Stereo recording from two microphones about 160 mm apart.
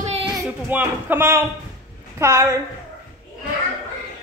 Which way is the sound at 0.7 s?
10° right (ahead or behind).